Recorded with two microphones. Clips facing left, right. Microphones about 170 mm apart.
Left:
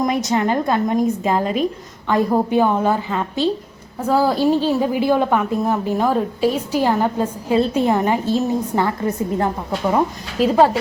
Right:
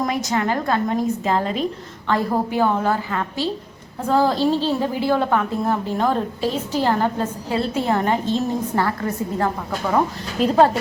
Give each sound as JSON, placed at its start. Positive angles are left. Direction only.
{"t": 0.3, "sound": "a woman's voice", "side_deg": 20}
{"t": 4.0, "sound": "a woman's voice", "side_deg": 5}
{"t": 10.4, "sound": "speech", "side_deg": 5}